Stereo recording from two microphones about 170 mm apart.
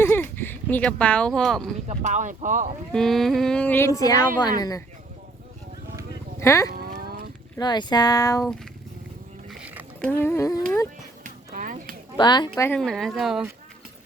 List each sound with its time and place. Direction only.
0.0 s a sound: 10° left (ahead or behind)
1.9 s speech: 40° right (ahead or behind)
2.9 s a woman's voice: centre (ahead or behind); by 4.8 s 20° left (ahead or behind)
6.4 s cattle: 15° left (ahead or behind)
6.7 s livestock: 60° right (ahead or behind)
7.6 s speech: 25° left (ahead or behind)
9.5 s a sound: 10° right (ahead or behind)
10.0 s a woman's voice: 10° left (ahead or behind)
11.2 s a sound: 50° right (ahead or behind)
12.1 s speech: 25° left (ahead or behind)
12.6 s speech: 5° left (ahead or behind)